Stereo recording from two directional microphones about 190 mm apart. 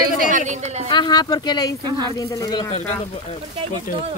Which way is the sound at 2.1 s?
20° left (ahead or behind).